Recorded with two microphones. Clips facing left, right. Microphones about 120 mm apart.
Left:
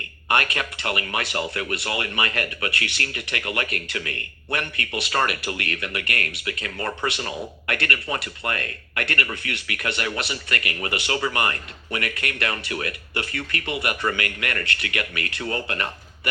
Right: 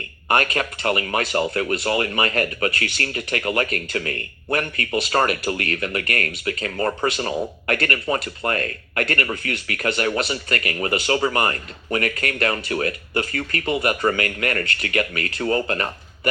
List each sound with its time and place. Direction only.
0.3 s speech: 35° right (ahead or behind)